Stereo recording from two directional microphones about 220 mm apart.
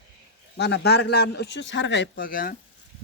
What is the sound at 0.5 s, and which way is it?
Speech, 50° left (ahead or behind).